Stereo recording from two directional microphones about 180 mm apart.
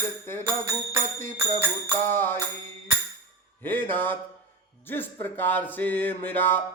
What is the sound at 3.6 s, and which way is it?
Music, 10° left (ahead or behind).